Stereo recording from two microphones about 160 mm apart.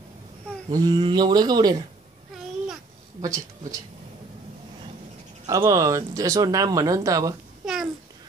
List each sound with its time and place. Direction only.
0.7 s speech: 25° right (ahead or behind)
3.2 s speech: 20° right (ahead or behind)
5.5 s speech: 20° right (ahead or behind)
7.6 s babbling: 5° right (ahead or behind)